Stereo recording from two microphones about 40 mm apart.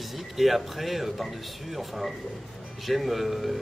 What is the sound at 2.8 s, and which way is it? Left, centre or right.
Speech, centre.